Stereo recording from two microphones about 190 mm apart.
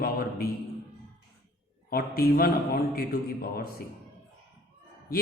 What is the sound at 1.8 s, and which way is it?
A man's voice, 50° left (ahead or behind).